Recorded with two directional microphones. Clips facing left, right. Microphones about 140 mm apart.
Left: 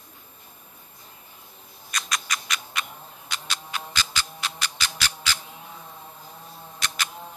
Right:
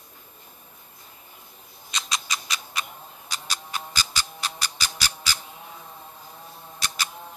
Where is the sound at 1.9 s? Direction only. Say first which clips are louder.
Left 1 dB; 25° right (ahead or behind).